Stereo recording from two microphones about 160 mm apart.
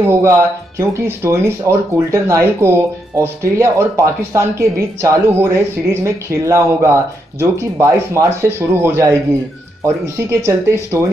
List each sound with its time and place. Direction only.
0.0 s speech: 15° right (ahead or behind)
10.4 s speech: 15° right (ahead or behind)